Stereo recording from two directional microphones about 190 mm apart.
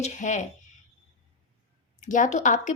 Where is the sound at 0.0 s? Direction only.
40° left (ahead or behind).